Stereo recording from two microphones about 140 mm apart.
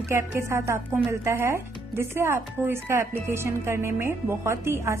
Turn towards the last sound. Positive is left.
turn(degrees=-20)  # may be behind; listen again after turning